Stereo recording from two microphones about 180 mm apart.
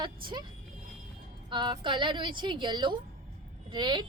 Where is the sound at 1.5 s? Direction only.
25° right (ahead or behind).